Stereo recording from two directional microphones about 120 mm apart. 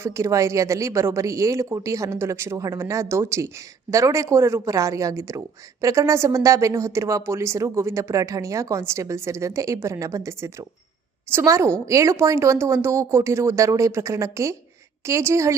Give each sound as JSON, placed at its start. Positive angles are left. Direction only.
{"t": 0.0, "sound": "speech", "side_deg": -25}